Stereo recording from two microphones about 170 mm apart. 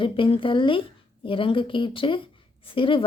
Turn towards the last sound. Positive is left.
turn(degrees=30)  # may be behind; listen again after turning